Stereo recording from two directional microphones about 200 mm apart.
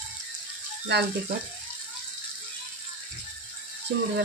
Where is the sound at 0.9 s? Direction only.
55° right (ahead or behind).